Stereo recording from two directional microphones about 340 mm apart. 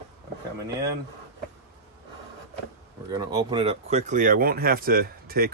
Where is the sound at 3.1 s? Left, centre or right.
Centre.